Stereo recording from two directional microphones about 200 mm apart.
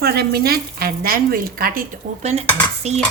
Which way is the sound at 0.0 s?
50° right (ahead or behind).